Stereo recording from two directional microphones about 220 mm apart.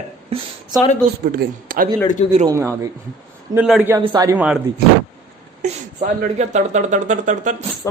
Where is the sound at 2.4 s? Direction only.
15° right (ahead or behind).